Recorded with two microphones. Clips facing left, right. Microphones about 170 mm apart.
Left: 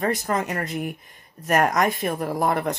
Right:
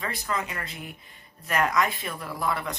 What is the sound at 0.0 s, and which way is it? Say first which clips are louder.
Speech: left 7 dB; 45° left (ahead or behind).